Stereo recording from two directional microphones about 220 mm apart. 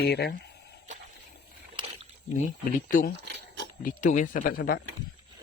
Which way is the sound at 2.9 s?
35° left (ahead or behind).